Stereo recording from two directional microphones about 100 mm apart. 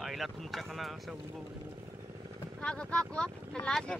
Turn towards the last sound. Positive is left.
turn(degrees=10)  # may be behind; listen again after turning